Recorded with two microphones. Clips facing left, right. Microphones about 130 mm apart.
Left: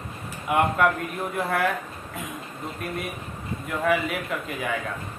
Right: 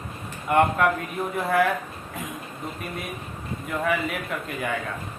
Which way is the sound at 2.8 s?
Centre (ahead or behind).